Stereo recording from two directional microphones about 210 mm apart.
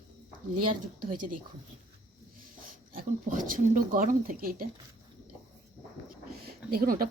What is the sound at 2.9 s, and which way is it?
Speech, 40° right (ahead or behind).